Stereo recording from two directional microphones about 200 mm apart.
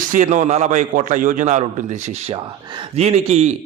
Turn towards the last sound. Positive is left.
turn(degrees=-30)  # may be behind; listen again after turning